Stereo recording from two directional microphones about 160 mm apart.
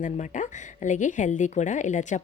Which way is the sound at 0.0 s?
50° left (ahead or behind).